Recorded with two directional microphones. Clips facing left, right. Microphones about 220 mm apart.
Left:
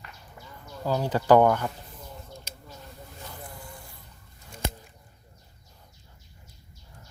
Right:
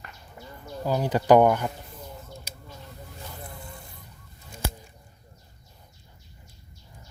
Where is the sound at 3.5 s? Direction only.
25° right (ahead or behind).